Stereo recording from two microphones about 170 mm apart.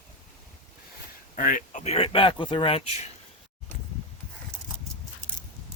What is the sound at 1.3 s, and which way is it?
Speech, 50° left (ahead or behind).